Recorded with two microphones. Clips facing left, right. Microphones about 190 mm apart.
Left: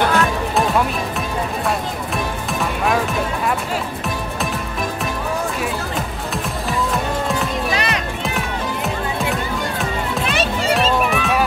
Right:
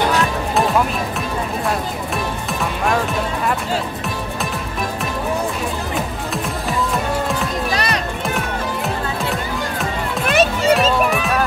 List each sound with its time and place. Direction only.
7.7 s music: 35° right (ahead or behind)
10.2 s music: 45° right (ahead or behind)
11.1 s music: centre (ahead or behind)